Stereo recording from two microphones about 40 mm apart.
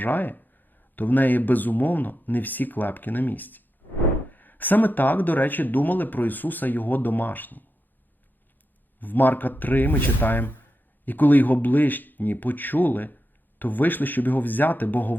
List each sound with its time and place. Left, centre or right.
0.0 s speech: left
9.0 s speech: left